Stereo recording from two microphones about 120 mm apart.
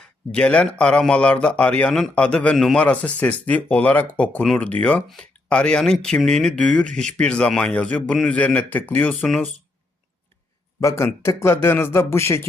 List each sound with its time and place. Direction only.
0.0 s speech: 10° left (ahead or behind)
10.8 s a man's voice: 25° left (ahead or behind)